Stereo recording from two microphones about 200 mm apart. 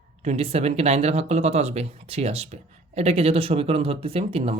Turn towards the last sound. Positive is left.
turn(degrees=-30)  # may be behind; listen again after turning